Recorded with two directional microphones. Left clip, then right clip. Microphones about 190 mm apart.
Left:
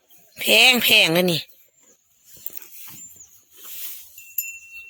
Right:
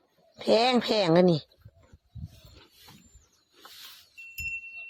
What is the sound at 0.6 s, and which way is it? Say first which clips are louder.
Speech: left 10 dB; 10° left (ahead or behind).